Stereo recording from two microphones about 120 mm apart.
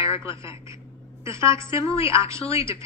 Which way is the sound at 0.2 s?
25° right (ahead or behind).